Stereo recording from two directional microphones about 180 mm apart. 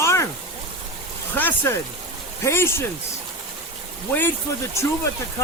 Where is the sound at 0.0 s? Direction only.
15° left (ahead or behind).